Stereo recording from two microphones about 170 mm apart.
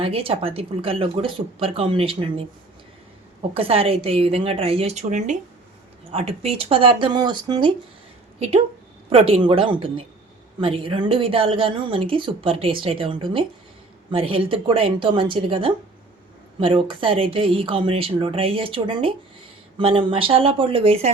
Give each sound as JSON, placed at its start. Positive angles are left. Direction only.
{"t": 0.0, "sound": "a woman's voice", "side_deg": -35}
{"t": 3.5, "sound": "a woman's voice", "side_deg": -35}
{"t": 6.1, "sound": "a woman's voice", "side_deg": -35}
{"t": 8.4, "sound": "a woman's voice", "side_deg": -35}